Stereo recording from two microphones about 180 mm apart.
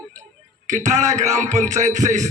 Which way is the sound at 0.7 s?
40° right (ahead or behind).